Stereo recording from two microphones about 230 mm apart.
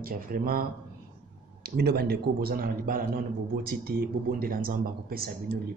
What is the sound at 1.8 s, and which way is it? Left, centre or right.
Speech, right.